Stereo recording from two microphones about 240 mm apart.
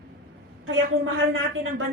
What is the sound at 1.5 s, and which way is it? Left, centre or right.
Speech, right.